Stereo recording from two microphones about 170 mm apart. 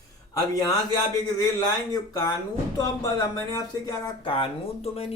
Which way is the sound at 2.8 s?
20° left (ahead or behind).